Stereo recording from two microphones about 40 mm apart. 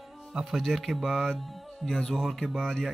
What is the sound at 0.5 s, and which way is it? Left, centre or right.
Speech, centre.